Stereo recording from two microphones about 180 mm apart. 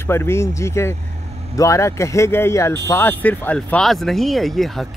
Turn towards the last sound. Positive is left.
turn(degrees=0)  # may be behind; listen again after turning